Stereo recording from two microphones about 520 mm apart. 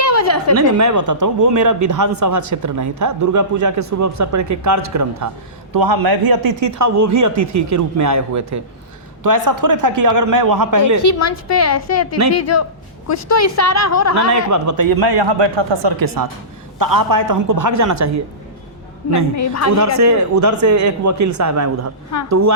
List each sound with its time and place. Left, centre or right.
0.0 s a sound: left
0.5 s speech: right
11.0 s a woman's voice: left
14.5 s speech: right
16.7 s speech: right
19.4 s a woman's voice: left
20.0 s speech: right